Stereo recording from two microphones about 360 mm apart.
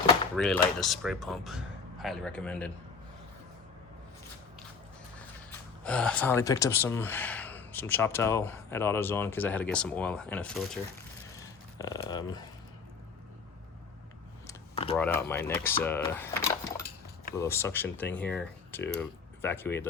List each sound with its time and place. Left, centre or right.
0.3 s speech: centre
5.5 s speech: centre
11.8 s speech: centre
14.4 s a sound: centre
14.9 s speech: centre